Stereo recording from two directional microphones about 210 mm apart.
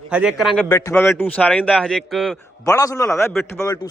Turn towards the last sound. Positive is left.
turn(degrees=15)  # may be behind; listen again after turning